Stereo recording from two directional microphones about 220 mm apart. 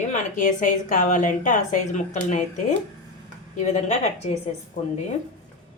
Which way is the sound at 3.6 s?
30° left (ahead or behind).